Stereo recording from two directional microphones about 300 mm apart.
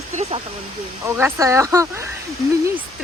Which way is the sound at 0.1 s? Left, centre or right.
Right.